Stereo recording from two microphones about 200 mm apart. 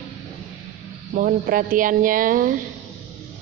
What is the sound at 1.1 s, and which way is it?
A woman's voice, 45° right (ahead or behind).